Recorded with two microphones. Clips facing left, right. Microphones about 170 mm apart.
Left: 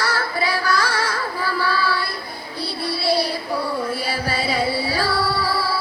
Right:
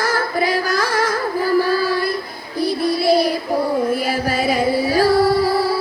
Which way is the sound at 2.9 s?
45° right (ahead or behind).